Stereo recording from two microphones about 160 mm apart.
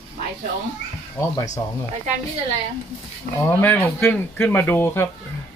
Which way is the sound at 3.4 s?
10° left (ahead or behind).